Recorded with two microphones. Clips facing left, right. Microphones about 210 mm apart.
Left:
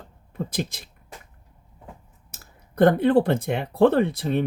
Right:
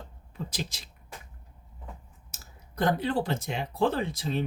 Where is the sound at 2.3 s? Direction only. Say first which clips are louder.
Left 5 dB; 60° left (ahead or behind).